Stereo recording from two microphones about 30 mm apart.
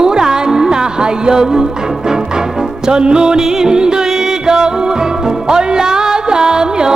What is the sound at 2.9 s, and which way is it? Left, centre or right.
Music, right.